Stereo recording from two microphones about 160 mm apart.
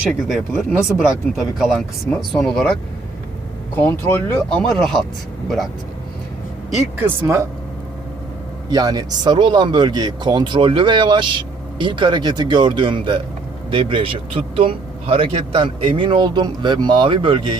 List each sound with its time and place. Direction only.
0.1 s speech: centre (ahead or behind)
3.8 s speech: 10° left (ahead or behind)
6.9 s speech: 10° right (ahead or behind)
8.7 s speech: 25° right (ahead or behind)